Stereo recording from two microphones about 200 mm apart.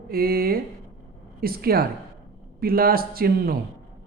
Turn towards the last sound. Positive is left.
turn(degrees=-50)  # may be behind; listen again after turning